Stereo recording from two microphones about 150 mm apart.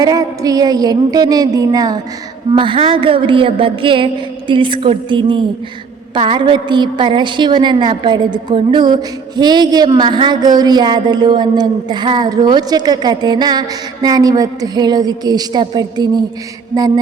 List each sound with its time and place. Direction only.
0.0 s a woman's voice: 25° right (ahead or behind)